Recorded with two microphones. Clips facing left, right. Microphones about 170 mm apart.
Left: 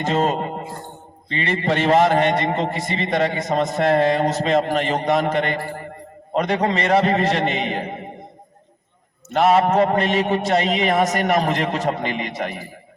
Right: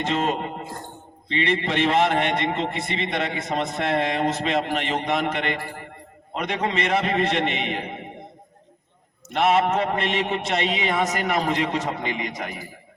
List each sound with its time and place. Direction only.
0.0 s a man's voice: 40° left (ahead or behind)
9.3 s a man's voice: 40° left (ahead or behind)